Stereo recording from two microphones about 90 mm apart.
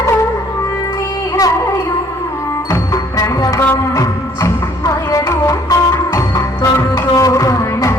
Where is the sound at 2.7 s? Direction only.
40° left (ahead or behind).